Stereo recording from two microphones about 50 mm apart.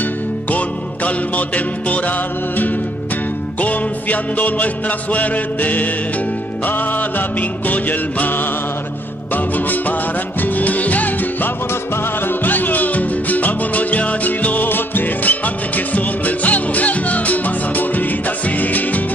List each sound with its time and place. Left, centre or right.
0.5 s music: left